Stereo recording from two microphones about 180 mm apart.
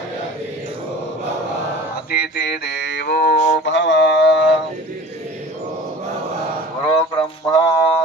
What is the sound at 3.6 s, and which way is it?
Mantra, 90° left.